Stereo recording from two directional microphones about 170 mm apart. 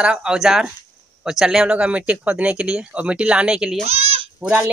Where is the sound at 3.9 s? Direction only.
40° right (ahead or behind).